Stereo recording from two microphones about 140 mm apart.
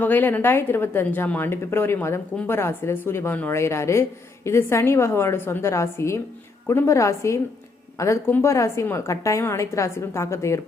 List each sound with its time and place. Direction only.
0.0 s a woman's voice: 15° left (ahead or behind)